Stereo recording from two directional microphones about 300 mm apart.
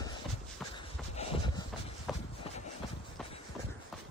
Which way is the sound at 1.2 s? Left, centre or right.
Left.